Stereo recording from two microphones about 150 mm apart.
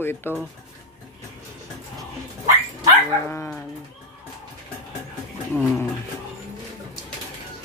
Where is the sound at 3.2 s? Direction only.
15° left (ahead or behind).